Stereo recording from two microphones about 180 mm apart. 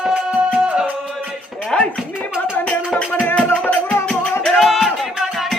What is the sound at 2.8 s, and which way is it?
Music, centre (ahead or behind).